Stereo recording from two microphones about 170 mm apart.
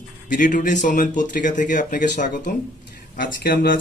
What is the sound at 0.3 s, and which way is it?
Speech, 50° left (ahead or behind).